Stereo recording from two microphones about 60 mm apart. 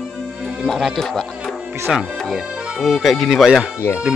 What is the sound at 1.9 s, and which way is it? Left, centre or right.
Speech, centre.